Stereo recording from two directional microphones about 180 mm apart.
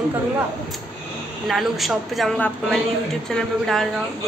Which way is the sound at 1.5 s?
Centre (ahead or behind).